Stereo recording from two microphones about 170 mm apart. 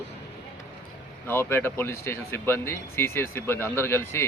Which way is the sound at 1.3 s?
15° left (ahead or behind).